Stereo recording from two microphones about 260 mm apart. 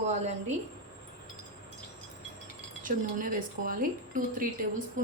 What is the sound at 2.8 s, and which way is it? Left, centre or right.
Speech, right.